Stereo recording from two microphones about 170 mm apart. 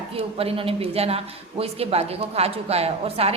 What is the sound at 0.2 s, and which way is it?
Speech, 35° right (ahead or behind).